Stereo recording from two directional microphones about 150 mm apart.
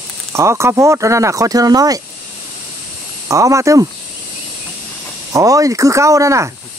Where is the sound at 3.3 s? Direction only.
20° right (ahead or behind).